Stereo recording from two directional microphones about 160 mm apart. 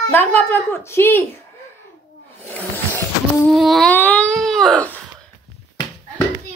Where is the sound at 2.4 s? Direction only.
10° left (ahead or behind).